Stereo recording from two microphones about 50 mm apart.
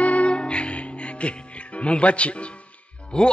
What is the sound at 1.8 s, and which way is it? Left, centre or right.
Music, left.